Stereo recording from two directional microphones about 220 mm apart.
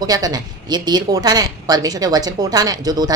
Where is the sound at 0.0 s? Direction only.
15° right (ahead or behind).